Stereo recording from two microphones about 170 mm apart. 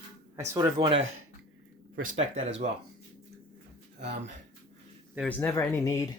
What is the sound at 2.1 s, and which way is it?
Speech, 35° right (ahead or behind).